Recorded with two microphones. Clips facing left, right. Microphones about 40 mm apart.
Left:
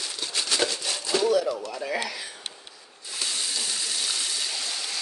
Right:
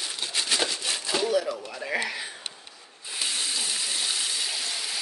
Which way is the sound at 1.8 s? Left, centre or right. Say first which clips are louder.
Right 1 dB; centre.